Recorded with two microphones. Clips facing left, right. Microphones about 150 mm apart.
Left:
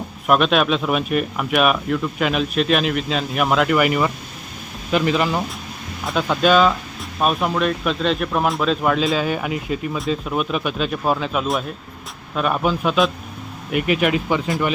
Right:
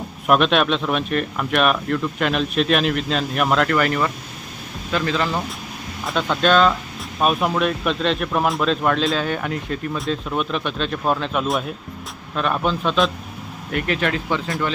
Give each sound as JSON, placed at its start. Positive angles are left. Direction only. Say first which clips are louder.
{"t": 0.3, "sound": "speech", "louder": "even", "side_deg": 0}